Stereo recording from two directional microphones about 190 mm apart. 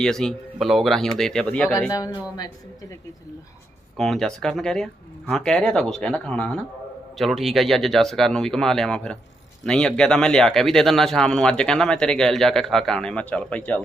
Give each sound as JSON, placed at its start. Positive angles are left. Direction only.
{"t": 0.0, "sound": "speech", "side_deg": 5}
{"t": 1.9, "sound": "speech", "side_deg": 20}
{"t": 3.9, "sound": "speech", "side_deg": 0}